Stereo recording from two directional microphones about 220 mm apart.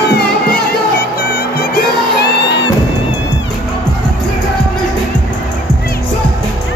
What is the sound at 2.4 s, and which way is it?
Music, 50° left (ahead or behind).